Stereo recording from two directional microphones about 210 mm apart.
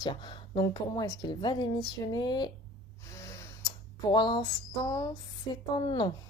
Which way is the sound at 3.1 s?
15° left (ahead or behind).